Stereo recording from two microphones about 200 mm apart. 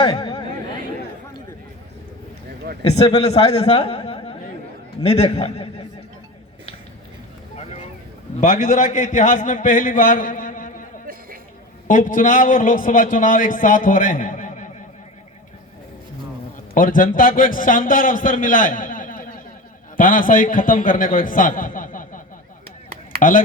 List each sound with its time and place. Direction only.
0.0 s chatter: 20° left (ahead or behind)
2.8 s a man's voice: 30° left (ahead or behind)
7.5 s vehicle: 30° left (ahead or behind)
8.4 s a man's voice: 40° left (ahead or behind)
11.0 s a sound: 45° right (ahead or behind)
11.9 s a man's voice: 40° left (ahead or behind)
16.7 s a man's voice: 45° left (ahead or behind)
23.2 s a man's voice: 40° left (ahead or behind)